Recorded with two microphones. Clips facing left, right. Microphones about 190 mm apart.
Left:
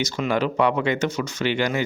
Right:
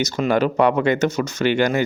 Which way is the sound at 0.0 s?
45° right (ahead or behind).